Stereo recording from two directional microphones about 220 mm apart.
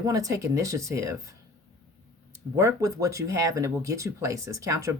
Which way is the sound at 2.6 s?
15° right (ahead or behind).